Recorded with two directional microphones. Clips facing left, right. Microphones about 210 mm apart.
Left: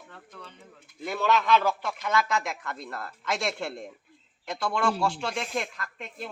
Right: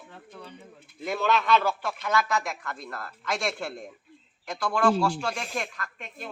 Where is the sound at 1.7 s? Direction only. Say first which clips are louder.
Even; 15° left (ahead or behind).